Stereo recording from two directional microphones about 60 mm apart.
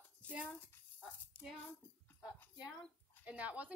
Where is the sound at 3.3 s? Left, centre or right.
Right.